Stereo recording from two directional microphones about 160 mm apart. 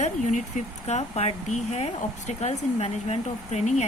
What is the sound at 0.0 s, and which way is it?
Speech, 50° left (ahead or behind).